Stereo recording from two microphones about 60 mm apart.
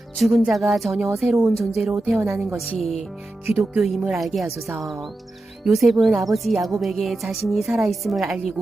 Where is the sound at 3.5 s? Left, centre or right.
Right.